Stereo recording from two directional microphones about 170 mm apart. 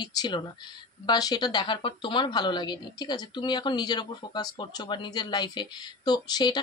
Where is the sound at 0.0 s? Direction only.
25° left (ahead or behind).